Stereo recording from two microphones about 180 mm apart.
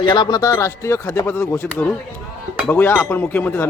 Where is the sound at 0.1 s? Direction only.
25° left (ahead or behind).